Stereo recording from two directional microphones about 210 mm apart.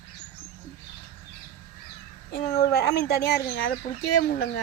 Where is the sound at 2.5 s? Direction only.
50° left (ahead or behind).